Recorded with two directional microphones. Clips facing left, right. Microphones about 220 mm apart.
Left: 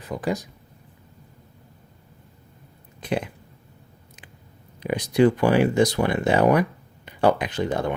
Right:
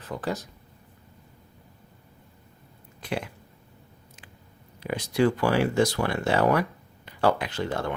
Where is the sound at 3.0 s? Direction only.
20° left (ahead or behind).